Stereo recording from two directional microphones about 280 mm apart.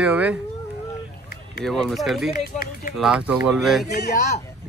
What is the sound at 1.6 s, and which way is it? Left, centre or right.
Speech, centre.